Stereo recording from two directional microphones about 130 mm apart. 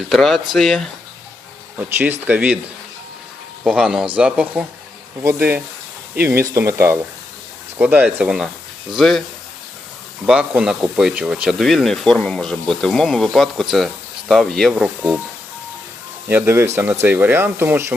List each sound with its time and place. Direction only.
0.1 s speech: centre (ahead or behind)
2.2 s speech: 10° right (ahead or behind)
3.6 s speech: 10° right (ahead or behind)
10.2 s speech: 10° right (ahead or behind)
16.3 s speech: 20° right (ahead or behind)